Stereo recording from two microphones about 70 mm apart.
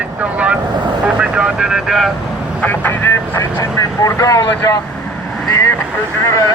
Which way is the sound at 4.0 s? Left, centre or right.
Left.